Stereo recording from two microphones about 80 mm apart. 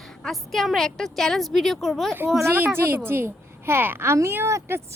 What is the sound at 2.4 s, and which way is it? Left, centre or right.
A child's voice, right.